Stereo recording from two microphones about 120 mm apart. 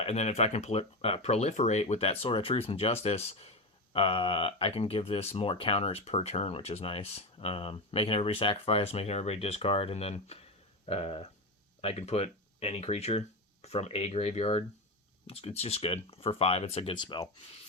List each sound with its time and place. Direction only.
0.0 s speech: 65° left (ahead or behind)
16.9 s speech: 40° left (ahead or behind)